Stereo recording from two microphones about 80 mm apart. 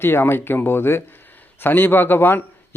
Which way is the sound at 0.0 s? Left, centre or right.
Left.